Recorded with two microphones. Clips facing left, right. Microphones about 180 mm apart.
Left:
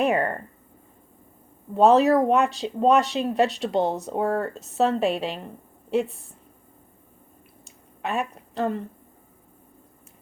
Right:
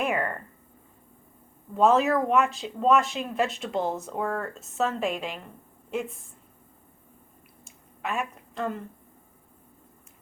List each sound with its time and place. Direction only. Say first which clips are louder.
0.0 s speech: left 5 dB; 35° left (ahead or behind)
1.7 s speech: left 4 dB; 35° left (ahead or behind)
8.0 s a woman's voice: left 3 dB; 35° left (ahead or behind)